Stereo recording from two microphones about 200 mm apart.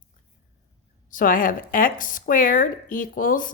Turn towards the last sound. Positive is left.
turn(degrees=45)  # may be behind; listen again after turning